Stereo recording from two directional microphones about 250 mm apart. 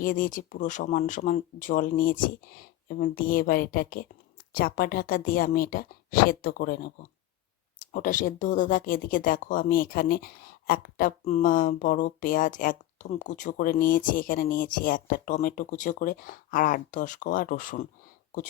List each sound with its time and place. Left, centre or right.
0.0 s speech: left